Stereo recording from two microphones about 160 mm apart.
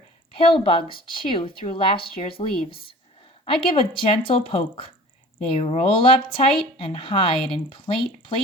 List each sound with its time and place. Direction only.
0.3 s speech: 30° left (ahead or behind)